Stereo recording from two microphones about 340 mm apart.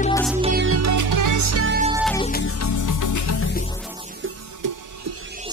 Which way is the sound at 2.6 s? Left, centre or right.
Left.